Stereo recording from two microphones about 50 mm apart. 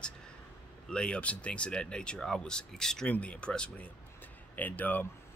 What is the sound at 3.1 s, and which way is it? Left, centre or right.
Speech, left.